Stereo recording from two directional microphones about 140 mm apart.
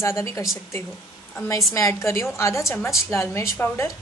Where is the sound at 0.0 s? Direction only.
20° left (ahead or behind).